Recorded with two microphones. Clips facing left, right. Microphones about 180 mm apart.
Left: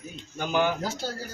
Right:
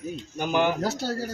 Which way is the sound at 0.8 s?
70° right (ahead or behind).